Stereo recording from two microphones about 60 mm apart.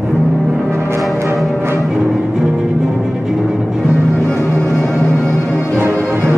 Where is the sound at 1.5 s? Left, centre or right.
Right.